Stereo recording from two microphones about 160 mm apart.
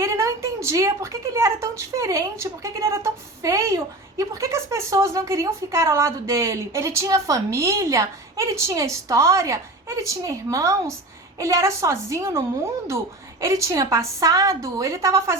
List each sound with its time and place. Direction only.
0.0 s a woman's voice: 20° right (ahead or behind)